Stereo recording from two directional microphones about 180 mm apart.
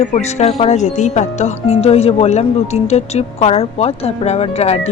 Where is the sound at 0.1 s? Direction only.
35° left (ahead or behind).